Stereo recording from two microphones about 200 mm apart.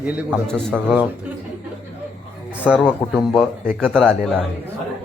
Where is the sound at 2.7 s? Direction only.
Centre (ahead or behind).